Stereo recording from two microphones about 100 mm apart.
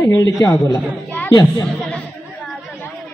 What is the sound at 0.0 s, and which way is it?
A man's voice, 30° left (ahead or behind).